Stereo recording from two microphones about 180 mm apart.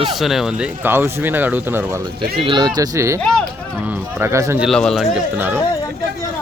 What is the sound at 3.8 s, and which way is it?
Speech, 10° right (ahead or behind).